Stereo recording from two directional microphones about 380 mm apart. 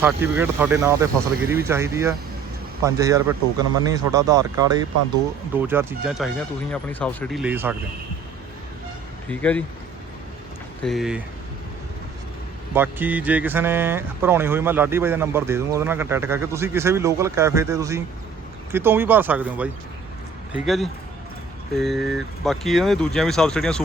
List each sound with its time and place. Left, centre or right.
0.0 s speech: centre
9.3 s speech: centre
10.8 s speech: centre
12.7 s speech: centre